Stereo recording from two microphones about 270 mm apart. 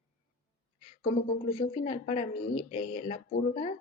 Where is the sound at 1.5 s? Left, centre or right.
Left.